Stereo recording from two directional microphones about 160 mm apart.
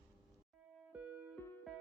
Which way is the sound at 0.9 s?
10° right (ahead or behind).